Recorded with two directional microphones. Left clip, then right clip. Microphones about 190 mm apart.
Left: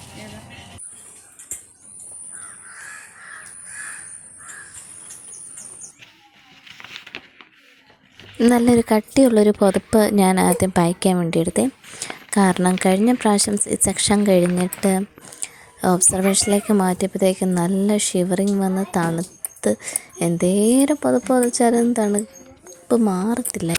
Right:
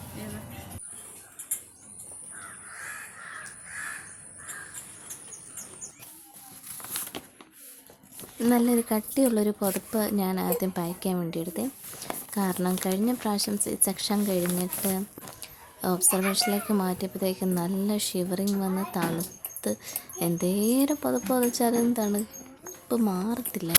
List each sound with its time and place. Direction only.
8.4 s a woman's voice: 45° left (ahead or behind)